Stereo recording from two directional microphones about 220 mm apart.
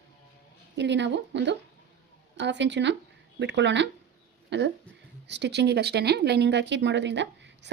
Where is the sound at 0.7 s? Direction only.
55° right (ahead or behind).